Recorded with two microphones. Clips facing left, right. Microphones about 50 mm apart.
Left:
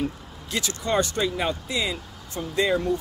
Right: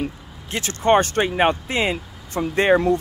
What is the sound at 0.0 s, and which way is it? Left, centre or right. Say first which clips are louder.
Speech: right 1 dB; right.